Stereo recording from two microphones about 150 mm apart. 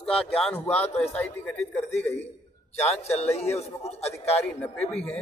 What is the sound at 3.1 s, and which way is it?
A man's voice, 45° left (ahead or behind).